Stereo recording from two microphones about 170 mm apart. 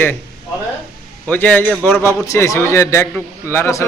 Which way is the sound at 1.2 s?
10° left (ahead or behind).